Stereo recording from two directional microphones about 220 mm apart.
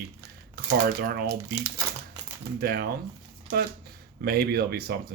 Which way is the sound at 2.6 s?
45° right (ahead or behind).